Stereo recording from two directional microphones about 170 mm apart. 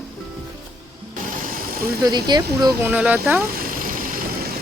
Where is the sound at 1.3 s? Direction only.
55° right (ahead or behind).